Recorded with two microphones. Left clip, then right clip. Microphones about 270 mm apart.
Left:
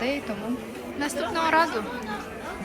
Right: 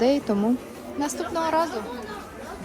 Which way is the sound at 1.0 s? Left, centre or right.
Centre.